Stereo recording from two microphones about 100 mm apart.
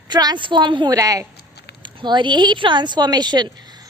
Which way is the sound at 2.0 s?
50° right (ahead or behind).